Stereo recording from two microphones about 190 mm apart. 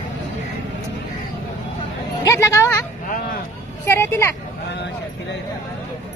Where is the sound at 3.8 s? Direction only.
15° left (ahead or behind).